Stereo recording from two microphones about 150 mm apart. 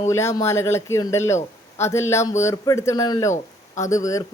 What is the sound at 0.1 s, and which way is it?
Speech, 20° left (ahead or behind).